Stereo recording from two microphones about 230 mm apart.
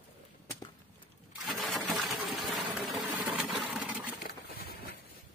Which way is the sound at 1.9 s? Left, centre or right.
Centre.